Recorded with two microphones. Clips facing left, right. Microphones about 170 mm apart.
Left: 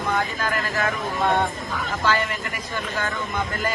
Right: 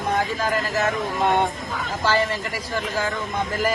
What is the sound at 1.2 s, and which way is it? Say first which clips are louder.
Speech: right 1 dB; 20° right (ahead or behind).